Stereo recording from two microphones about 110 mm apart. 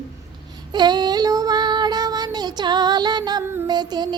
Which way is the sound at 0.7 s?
40° right (ahead or behind).